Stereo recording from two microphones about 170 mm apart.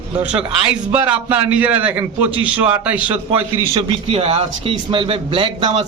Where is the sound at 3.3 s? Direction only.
35° right (ahead or behind).